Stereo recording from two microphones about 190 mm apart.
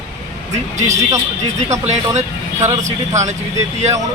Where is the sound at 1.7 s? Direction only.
40° right (ahead or behind).